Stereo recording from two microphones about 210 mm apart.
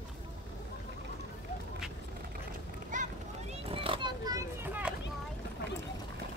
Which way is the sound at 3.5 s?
25° right (ahead or behind).